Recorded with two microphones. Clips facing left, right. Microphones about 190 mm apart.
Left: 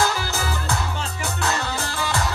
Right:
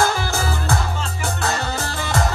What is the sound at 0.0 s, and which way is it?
Music, 50° right (ahead or behind).